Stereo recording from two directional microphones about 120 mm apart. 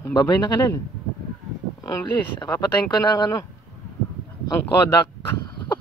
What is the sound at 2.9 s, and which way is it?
Speech, 30° left (ahead or behind).